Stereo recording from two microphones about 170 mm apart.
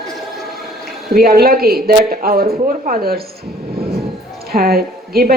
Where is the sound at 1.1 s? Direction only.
60° right (ahead or behind).